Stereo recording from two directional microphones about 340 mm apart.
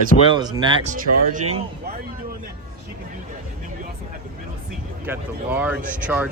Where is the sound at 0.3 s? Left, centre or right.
Centre.